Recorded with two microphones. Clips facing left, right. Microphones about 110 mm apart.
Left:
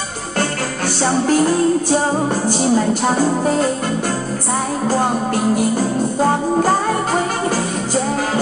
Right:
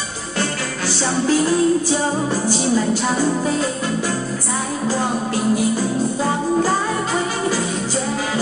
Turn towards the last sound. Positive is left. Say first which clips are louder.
# left 2 dB
turn(degrees=50)  # may be behind; listen again after turning